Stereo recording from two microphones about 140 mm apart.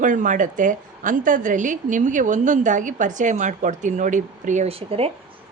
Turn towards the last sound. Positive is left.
turn(degrees=-45)  # may be behind; listen again after turning